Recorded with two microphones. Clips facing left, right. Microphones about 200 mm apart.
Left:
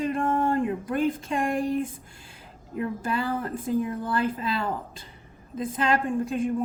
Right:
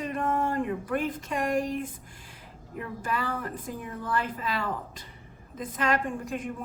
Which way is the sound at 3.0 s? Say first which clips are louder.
Even; 30° left (ahead or behind).